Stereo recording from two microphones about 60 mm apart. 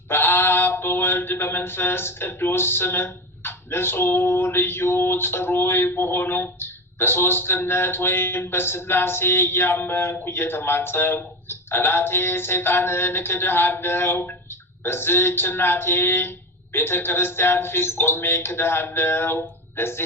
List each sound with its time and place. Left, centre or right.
0.1 s mantra: left